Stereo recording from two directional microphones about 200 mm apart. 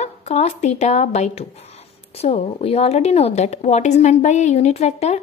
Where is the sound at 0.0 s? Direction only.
35° left (ahead or behind).